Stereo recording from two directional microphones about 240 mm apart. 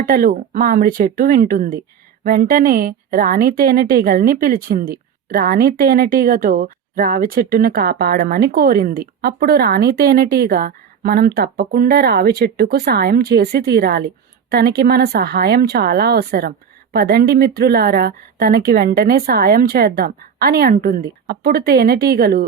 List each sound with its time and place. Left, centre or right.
0.1 s a woman's voice: right